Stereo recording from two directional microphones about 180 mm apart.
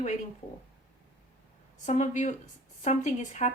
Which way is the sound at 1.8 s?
40° left (ahead or behind).